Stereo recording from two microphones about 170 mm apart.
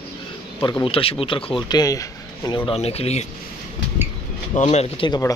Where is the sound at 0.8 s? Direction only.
35° left (ahead or behind).